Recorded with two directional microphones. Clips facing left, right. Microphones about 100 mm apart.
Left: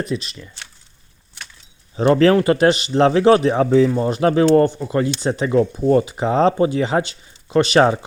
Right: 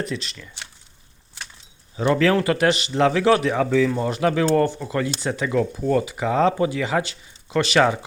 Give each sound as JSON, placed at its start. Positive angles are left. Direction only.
{"t": 0.1, "sound": "speech", "side_deg": 20}
{"t": 2.3, "sound": "speech", "side_deg": 25}
{"t": 4.5, "sound": "speech", "side_deg": 20}